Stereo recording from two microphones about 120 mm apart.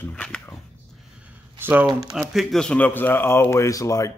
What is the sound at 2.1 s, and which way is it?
Speech, centre (ahead or behind).